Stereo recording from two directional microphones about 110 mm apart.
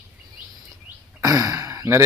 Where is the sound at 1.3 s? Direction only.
35° right (ahead or behind).